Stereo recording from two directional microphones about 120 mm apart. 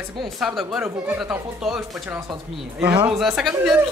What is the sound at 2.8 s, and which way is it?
Speech, 15° right (ahead or behind).